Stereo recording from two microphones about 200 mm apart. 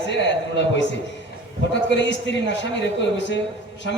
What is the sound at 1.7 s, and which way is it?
A man's voice, 60° left (ahead or behind).